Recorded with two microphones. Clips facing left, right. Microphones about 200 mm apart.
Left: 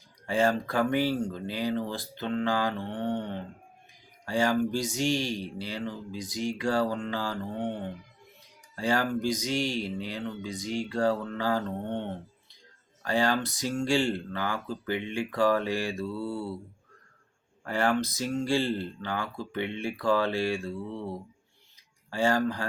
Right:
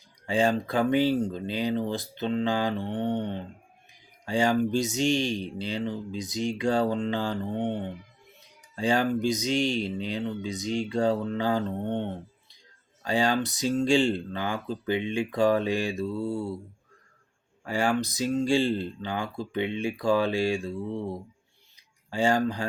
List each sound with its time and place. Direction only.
0.3 s speech: 15° right (ahead or behind)
17.6 s speech: 10° right (ahead or behind)